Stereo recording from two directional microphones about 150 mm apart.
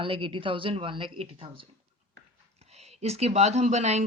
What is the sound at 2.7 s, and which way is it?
Speech, 45° right (ahead or behind).